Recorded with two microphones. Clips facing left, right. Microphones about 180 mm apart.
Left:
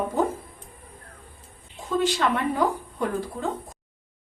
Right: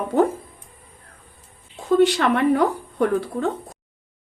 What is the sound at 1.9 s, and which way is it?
A woman's voice, 65° right (ahead or behind).